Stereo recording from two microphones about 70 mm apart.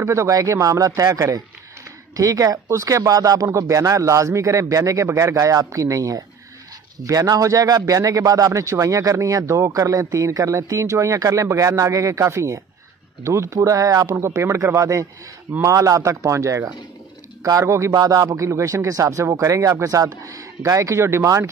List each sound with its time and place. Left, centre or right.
0.0 s speech: right
3.4 s speech: right
14.1 s speech: right
17.9 s speech: right